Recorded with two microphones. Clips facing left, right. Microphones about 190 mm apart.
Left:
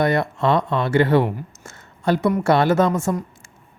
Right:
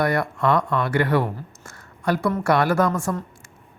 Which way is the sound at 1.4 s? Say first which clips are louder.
Left 3 dB; 25° left (ahead or behind).